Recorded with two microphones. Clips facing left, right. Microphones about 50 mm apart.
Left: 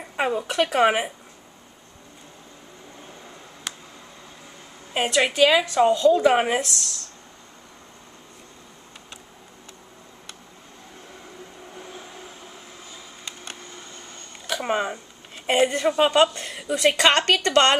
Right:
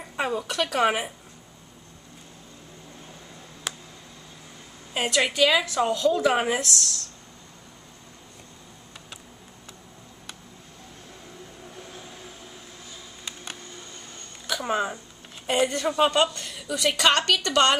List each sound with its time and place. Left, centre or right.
0.1 s a woman's voice: left
3.7 s tick: centre
4.9 s a woman's voice: centre
6.1 s speech: centre
14.6 s a sound: left
15.6 s speech: left
16.4 s a woman's voice: left